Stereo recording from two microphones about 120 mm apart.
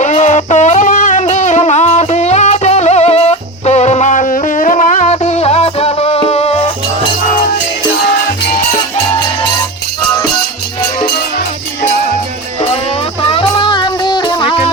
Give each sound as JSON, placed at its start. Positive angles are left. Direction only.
{"t": 0.0, "sound": "a sound", "side_deg": 80}
{"t": 1.3, "sound": "music", "side_deg": 85}
{"t": 13.4, "sound": "music", "side_deg": 40}